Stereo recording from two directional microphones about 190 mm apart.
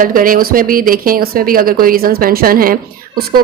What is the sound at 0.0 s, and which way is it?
A woman's voice, 45° right (ahead or behind).